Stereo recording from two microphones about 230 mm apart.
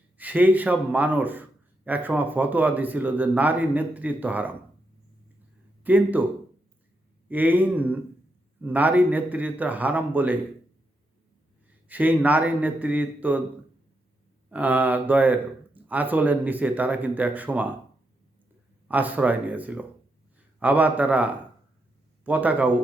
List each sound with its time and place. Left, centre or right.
0.2 s a man's voice: centre
5.8 s a man's voice: centre
7.3 s a man's voice: centre
11.9 s a man's voice: centre
14.5 s a man's voice: centre
18.9 s a man's voice: centre